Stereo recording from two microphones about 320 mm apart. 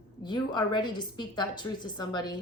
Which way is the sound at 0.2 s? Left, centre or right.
Centre.